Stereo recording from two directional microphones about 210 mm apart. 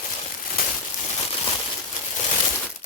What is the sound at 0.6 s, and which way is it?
Crumpling, 45° left (ahead or behind).